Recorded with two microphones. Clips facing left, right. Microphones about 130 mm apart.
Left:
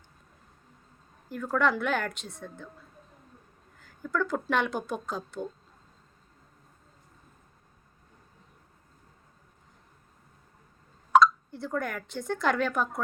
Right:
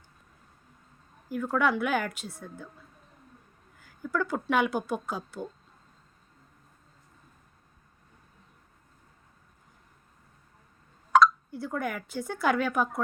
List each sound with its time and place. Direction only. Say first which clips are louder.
1.3 s a woman's voice: even; 5° right (ahead or behind)
3.8 s a woman's voice: even; 5° right (ahead or behind)
11.1 s speech: even; 5° right (ahead or behind)